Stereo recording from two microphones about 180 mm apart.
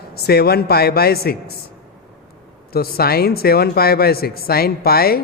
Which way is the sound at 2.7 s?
60° left (ahead or behind).